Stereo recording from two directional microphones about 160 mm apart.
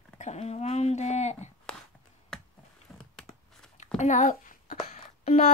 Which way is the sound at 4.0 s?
50° left (ahead or behind).